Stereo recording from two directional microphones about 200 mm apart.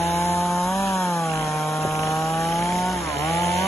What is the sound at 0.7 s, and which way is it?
Chainsaw, 15° left (ahead or behind).